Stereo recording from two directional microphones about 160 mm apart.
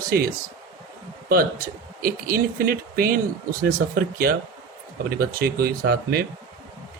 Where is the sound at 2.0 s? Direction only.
65° right (ahead or behind).